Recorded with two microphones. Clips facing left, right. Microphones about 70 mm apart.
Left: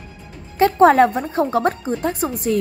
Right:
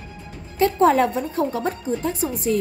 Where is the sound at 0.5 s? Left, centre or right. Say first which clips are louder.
Left 4 dB; left.